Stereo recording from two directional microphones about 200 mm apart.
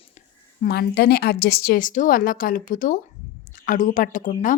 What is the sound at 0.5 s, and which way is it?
A woman's voice, 50° left (ahead or behind).